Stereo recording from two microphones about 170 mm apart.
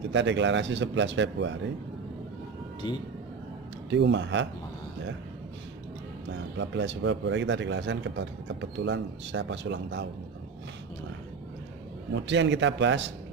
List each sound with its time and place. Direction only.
0.1 s a man's voice: 90° right
3.9 s a man's voice: 90° right
6.6 s a man's voice: 90° right
12.1 s a man's voice: 90° right